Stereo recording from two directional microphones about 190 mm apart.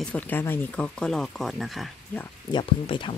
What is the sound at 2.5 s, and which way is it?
Speech, 25° left (ahead or behind).